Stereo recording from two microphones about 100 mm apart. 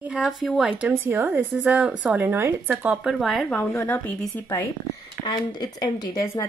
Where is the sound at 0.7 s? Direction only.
15° right (ahead or behind).